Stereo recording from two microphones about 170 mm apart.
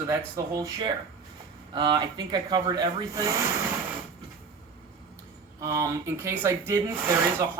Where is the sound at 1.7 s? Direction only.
25° right (ahead or behind).